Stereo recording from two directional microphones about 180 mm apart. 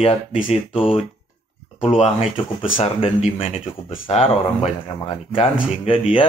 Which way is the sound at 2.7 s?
35° left (ahead or behind).